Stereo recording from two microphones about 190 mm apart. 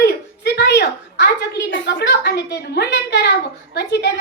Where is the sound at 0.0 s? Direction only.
60° left (ahead or behind).